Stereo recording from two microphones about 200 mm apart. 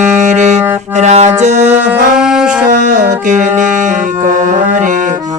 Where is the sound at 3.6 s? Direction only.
40° right (ahead or behind).